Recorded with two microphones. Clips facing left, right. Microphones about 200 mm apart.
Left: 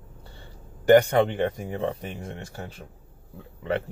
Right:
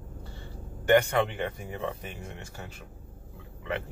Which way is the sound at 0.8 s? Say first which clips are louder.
Left 6 dB; 35° left (ahead or behind).